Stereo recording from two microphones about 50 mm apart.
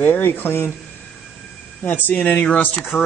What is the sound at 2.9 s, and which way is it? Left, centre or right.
Speech, left.